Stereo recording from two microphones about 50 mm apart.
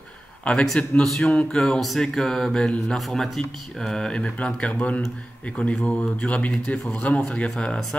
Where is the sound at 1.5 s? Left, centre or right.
Centre.